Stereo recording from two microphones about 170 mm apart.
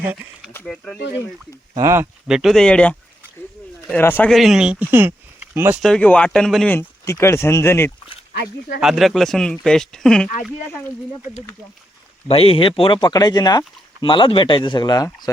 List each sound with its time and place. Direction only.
0.0 s speech: 10° right (ahead or behind)
0.5 s speech: 5° left (ahead or behind)
1.7 s speech: 15° right (ahead or behind)
2.2 s speech: 5° right (ahead or behind)
3.9 s speech: 10° left (ahead or behind)
4.3 s speech: centre (ahead or behind)
5.8 s speech: 5° left (ahead or behind)
6.7 s speech: 15° left (ahead or behind)
8.8 s speech: centre (ahead or behind)
12.3 s speech: 35° left (ahead or behind)